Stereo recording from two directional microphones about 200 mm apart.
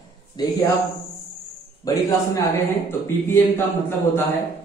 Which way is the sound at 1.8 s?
15° left (ahead or behind).